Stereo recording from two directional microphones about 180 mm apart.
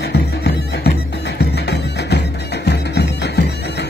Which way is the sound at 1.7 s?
70° left (ahead or behind).